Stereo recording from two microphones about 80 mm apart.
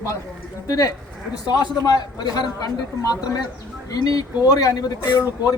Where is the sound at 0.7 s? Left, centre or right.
Left.